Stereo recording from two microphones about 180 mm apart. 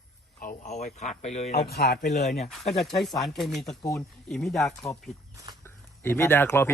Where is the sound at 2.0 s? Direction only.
45° left (ahead or behind).